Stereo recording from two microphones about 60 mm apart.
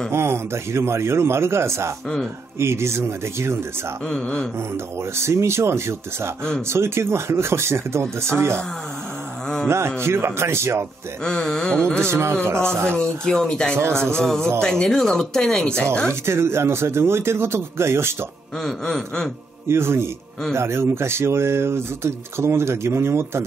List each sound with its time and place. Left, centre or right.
0.1 s speech: right
4.1 s speech: centre
5.1 s speech: right
9.7 s speech: right
11.2 s speech: centre
12.0 s speech: right
13.0 s speech: centre
16.1 s speech: right
18.6 s speech: centre
19.7 s speech: right